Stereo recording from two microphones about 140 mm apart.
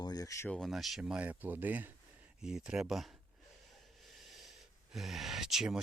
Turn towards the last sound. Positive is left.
turn(degrees=-5)  # may be behind; listen again after turning